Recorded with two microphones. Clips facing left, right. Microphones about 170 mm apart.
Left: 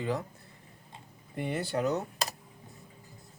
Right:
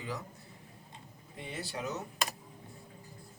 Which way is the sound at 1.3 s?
55° left (ahead or behind).